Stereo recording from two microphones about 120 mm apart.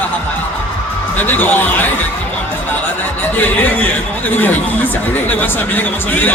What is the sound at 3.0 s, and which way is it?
A man's voice, 15° left (ahead or behind).